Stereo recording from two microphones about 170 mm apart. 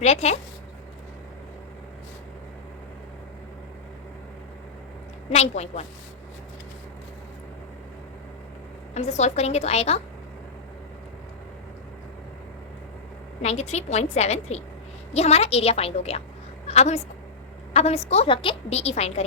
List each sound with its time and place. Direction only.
0.0 s a woman's voice: 40° left (ahead or behind)
5.3 s a woman's voice: 40° left (ahead or behind)
9.0 s a woman's voice: 40° left (ahead or behind)
13.4 s a woman's voice: 40° left (ahead or behind)